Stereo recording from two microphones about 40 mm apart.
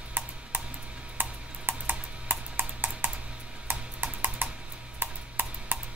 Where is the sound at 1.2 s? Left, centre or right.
Right.